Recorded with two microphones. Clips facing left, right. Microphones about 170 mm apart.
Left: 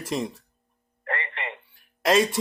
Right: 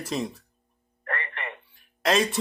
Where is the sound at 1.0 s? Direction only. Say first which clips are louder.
Left 2 dB; 20° left (ahead or behind).